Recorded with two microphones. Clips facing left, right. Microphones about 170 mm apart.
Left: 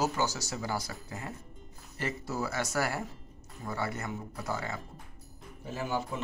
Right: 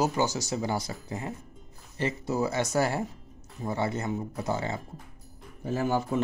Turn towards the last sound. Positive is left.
turn(degrees=-45)  # may be behind; listen again after turning